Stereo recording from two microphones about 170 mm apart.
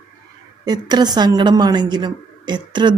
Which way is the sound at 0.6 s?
25° right (ahead or behind).